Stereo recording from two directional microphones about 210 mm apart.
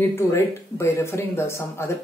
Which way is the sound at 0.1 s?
10° left (ahead or behind).